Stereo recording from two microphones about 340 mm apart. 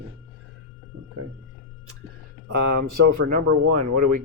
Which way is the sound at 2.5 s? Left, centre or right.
Right.